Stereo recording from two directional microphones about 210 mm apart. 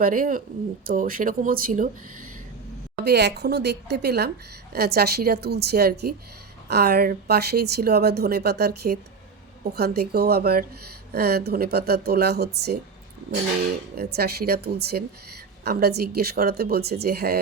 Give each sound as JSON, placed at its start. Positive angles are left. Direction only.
{"t": 0.0, "sound": "speech", "side_deg": -40}
{"t": 3.0, "sound": "a woman's voice", "side_deg": -50}
{"t": 13.9, "sound": "a woman's voice", "side_deg": -50}